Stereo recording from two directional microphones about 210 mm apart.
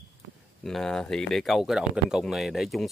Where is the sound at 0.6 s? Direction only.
Centre (ahead or behind).